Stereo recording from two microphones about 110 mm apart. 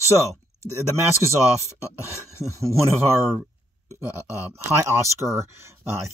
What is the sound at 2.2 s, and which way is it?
Speech, 30° right (ahead or behind).